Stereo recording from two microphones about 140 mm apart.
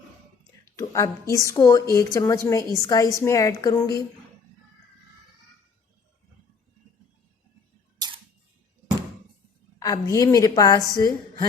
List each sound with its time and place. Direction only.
0.8 s a woman's voice: 20° left (ahead or behind)
9.8 s a woman's voice: 25° left (ahead or behind)